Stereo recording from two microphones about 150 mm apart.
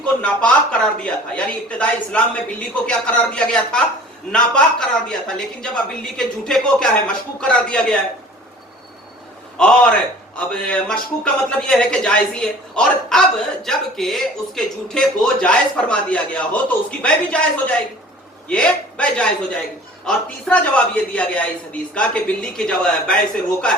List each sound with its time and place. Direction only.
0.0 s a man's voice: 5° left (ahead or behind)
9.6 s a man's voice: 5° left (ahead or behind)